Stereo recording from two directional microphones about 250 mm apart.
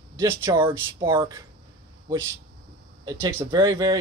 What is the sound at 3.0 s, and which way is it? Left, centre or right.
Speech, centre.